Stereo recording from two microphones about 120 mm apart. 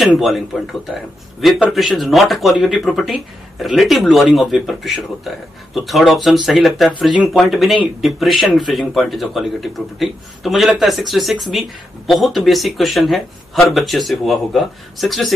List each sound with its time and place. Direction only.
0.0 s speech: centre (ahead or behind)
1.7 s speech: centre (ahead or behind)